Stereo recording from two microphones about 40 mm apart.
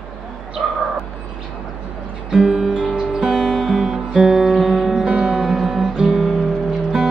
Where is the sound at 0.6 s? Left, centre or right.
Right.